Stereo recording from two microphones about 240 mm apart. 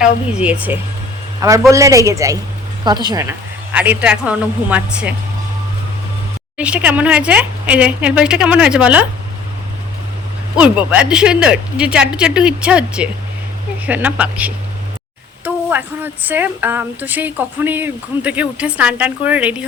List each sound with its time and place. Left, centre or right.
0.0 s a woman's voice: centre
6.6 s speech: centre
10.5 s a woman's voice: centre